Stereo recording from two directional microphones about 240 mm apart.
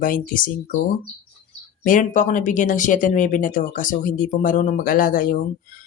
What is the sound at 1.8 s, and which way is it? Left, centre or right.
Speech, left.